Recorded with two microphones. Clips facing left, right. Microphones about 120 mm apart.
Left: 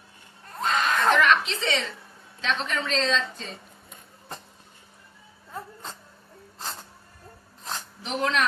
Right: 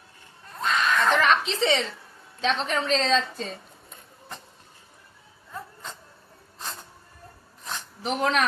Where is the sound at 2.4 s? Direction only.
35° right (ahead or behind).